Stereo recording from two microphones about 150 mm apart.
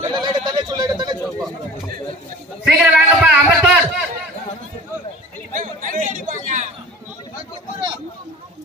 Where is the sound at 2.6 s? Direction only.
5° right (ahead or behind).